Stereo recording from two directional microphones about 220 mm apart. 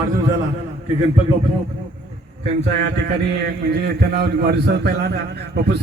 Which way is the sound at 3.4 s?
45° right (ahead or behind).